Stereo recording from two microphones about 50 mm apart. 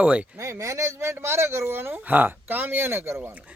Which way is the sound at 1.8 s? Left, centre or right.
Right.